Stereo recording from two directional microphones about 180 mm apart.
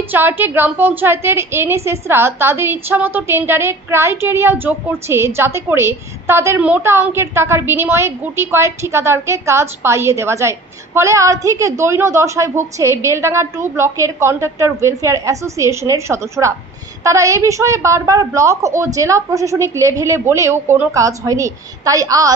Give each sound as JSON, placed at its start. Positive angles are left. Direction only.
{"t": 0.1, "sound": "a woman's voice", "side_deg": -10}